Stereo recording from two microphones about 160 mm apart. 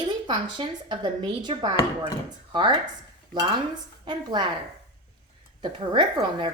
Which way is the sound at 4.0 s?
30° right (ahead or behind).